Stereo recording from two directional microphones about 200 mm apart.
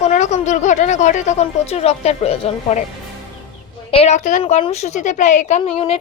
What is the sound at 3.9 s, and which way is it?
A woman's voice, 30° left (ahead or behind).